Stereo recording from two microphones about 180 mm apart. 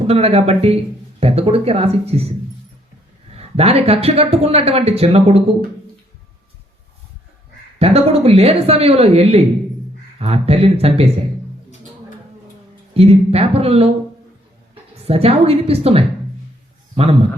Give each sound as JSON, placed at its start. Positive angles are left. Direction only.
{"t": 0.1, "sound": "speech", "side_deg": -35}
{"t": 3.3, "sound": "speech", "side_deg": -35}
{"t": 7.8, "sound": "speech", "side_deg": -35}
{"t": 12.9, "sound": "speech", "side_deg": -35}
{"t": 15.0, "sound": "speech", "side_deg": -35}